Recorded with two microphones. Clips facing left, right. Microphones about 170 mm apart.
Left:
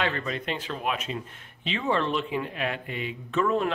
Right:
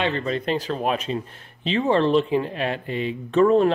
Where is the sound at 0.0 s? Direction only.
30° right (ahead or behind).